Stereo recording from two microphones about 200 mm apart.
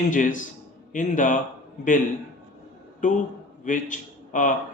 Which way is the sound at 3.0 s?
40° left (ahead or behind).